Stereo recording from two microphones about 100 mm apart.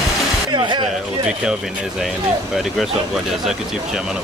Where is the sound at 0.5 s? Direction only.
50° right (ahead or behind).